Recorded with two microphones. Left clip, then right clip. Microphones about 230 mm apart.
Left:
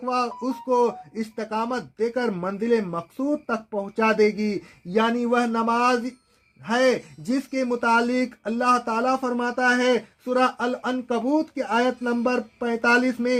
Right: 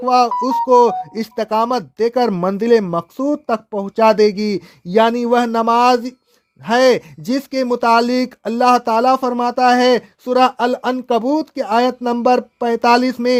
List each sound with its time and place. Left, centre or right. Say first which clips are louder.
0.0 s speech: right 12 dB; right